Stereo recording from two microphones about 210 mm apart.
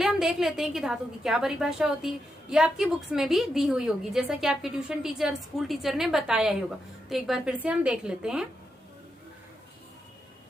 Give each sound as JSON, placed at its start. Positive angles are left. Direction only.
{"t": 0.0, "sound": "a woman's voice", "side_deg": 0}